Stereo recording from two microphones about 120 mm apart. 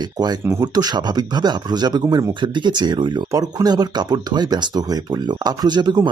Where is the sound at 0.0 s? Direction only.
35° right (ahead or behind).